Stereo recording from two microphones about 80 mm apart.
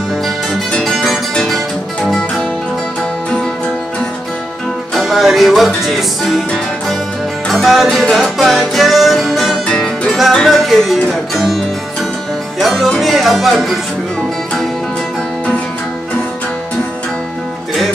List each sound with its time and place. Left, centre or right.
0.7 s music: centre
4.9 s music: centre
9.7 s music: centre
10.4 s music: centre
13.0 s speech: centre